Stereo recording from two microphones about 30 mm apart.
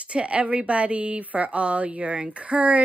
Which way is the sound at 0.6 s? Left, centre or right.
Right.